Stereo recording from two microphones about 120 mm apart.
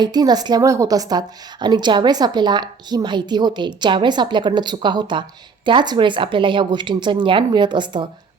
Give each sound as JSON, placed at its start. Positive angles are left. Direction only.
{"t": 0.0, "sound": "a woman's voice", "side_deg": -35}